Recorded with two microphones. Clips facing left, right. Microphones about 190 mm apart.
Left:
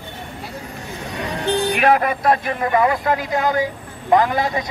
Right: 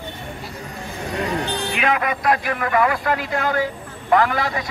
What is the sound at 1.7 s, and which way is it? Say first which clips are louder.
Speech: left 4 dB; 40° left (ahead or behind).